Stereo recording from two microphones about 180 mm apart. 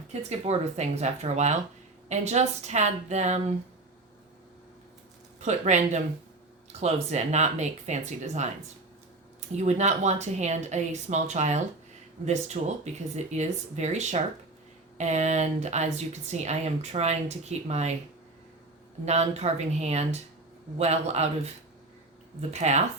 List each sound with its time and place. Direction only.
0.1 s speech: 35° right (ahead or behind)
5.4 s speech: 40° right (ahead or behind)
9.6 s speech: 40° right (ahead or behind)
19.0 s speech: 35° right (ahead or behind)